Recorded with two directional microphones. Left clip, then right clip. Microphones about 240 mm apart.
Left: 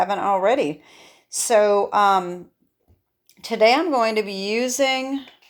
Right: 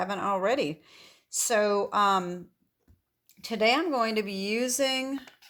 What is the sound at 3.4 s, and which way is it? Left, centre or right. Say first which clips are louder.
Speech: left 8 dB; right.